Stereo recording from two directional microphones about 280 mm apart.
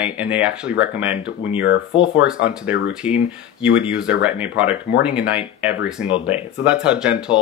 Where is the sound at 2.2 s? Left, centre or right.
Centre.